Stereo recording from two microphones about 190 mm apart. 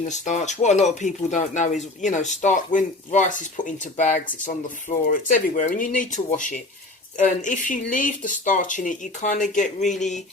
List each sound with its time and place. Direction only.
0.0 s speech: 40° left (ahead or behind)